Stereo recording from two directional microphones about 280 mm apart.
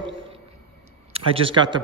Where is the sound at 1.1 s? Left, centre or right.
Centre.